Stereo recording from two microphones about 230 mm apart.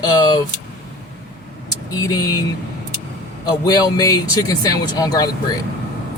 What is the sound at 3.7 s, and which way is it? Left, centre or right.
Speech, centre.